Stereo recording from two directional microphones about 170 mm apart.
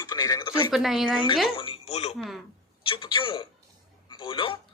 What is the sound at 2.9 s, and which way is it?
A man's voice, 30° left (ahead or behind).